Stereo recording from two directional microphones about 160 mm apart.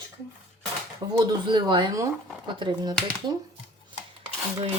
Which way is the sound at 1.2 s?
30° right (ahead or behind).